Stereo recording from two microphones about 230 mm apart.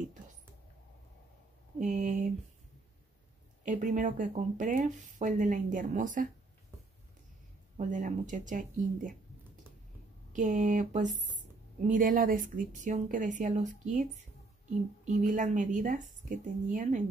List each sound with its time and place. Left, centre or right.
1.8 s speech: right
3.6 s speech: right
7.7 s speech: right
10.3 s speech: right